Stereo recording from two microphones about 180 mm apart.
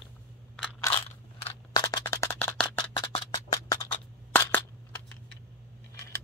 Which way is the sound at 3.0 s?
25° left (ahead or behind).